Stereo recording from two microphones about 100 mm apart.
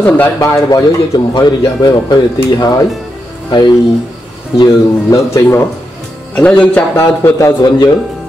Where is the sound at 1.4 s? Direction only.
45° left (ahead or behind).